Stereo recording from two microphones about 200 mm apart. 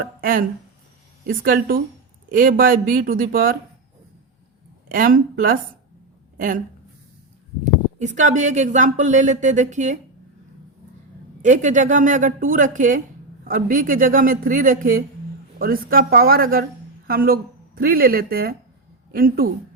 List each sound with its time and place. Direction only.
0.0 s a man's voice: 45° right (ahead or behind)
1.5 s a man's voice: 50° right (ahead or behind)
4.9 s a man's voice: 45° right (ahead or behind)
7.6 s speech: 35° right (ahead or behind)
11.4 s a man's voice: 40° right (ahead or behind)